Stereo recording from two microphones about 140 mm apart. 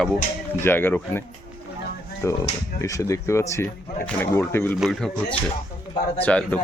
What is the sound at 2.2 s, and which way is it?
Speech, 20° left (ahead or behind).